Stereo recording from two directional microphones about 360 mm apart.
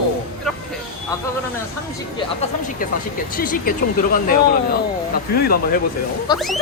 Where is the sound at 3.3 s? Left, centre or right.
Left.